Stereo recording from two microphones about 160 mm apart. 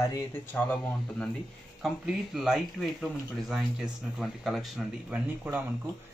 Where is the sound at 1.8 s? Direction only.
5° right (ahead or behind).